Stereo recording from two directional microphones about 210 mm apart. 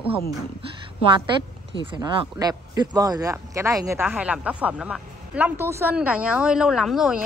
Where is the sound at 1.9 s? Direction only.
15° right (ahead or behind).